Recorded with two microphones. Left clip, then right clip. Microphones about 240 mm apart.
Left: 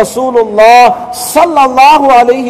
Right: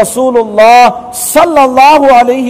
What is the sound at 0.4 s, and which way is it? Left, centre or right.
A man's voice, right.